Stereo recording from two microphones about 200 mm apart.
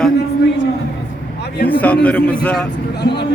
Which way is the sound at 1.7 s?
10° left (ahead or behind).